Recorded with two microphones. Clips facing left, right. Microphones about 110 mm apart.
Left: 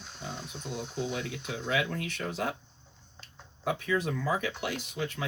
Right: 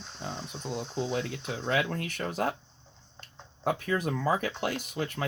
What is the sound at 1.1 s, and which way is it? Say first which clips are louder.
Speech: right 3 dB; 40° right (ahead or behind).